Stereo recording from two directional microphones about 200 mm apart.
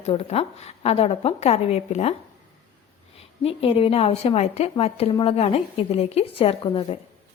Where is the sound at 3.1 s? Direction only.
30° left (ahead or behind).